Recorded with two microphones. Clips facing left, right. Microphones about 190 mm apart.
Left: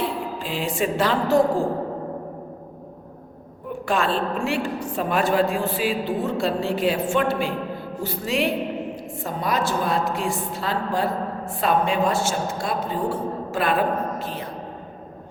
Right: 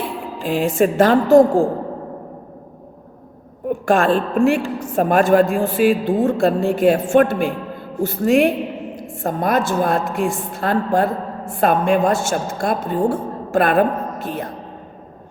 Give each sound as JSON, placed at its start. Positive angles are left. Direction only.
{"t": 0.4, "sound": "a woman's voice", "side_deg": -45}
{"t": 3.8, "sound": "a woman's voice", "side_deg": -50}